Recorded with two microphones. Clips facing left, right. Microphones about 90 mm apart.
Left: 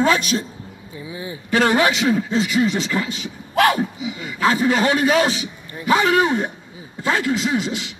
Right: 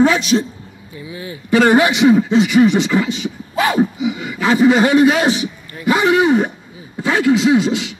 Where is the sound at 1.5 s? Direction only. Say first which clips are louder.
Right 5 dB; 55° right (ahead or behind).